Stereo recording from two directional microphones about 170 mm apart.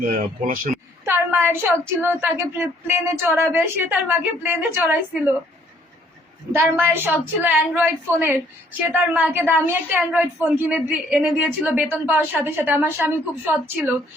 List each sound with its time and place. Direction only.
0.0 s speech: 50° right (ahead or behind)
1.0 s a woman's voice: 15° right (ahead or behind)
6.5 s a woman's voice: 15° right (ahead or behind)